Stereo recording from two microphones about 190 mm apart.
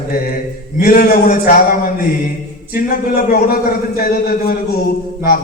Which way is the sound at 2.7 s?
50° left (ahead or behind).